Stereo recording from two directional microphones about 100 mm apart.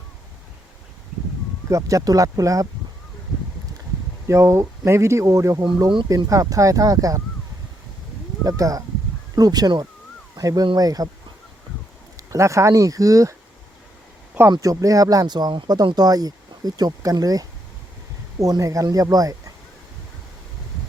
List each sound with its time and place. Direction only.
1.7 s speech: 35° right (ahead or behind)
4.3 s speech: 30° right (ahead or behind)
8.4 s speech: 35° right (ahead or behind)
12.1 s speech: 30° right (ahead or behind)
14.5 s speech: 35° right (ahead or behind)